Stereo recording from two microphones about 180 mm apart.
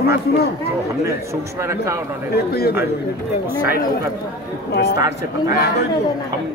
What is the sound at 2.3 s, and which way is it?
Speech, 60° left (ahead or behind).